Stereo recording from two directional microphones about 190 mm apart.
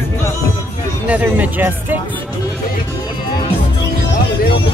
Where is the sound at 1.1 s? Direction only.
10° right (ahead or behind).